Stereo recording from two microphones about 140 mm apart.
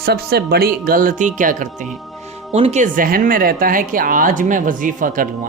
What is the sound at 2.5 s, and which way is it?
A man's voice, 50° right (ahead or behind).